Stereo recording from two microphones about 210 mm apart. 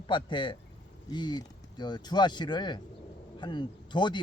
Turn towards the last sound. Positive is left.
turn(degrees=20)  # may be behind; listen again after turning